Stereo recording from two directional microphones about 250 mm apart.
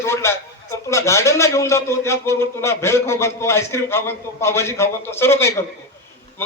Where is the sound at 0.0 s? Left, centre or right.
Centre.